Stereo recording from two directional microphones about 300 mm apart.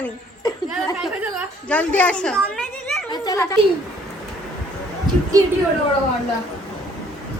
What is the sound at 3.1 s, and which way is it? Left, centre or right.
Speech, centre.